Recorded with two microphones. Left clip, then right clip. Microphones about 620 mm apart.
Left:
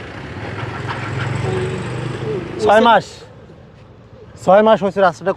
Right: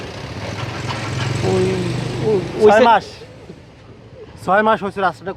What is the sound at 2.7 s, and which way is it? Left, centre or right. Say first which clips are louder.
Speech: left 3 dB; left.